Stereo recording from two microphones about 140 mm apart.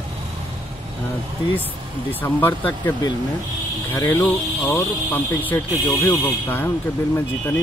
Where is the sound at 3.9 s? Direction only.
20° left (ahead or behind).